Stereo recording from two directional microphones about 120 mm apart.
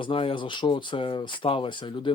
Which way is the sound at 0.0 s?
45° left (ahead or behind).